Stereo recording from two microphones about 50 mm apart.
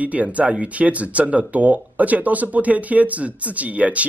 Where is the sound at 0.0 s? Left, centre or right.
Right.